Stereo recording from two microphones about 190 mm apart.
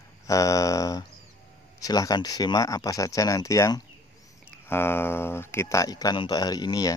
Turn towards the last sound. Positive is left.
turn(degrees=20)  # may be behind; listen again after turning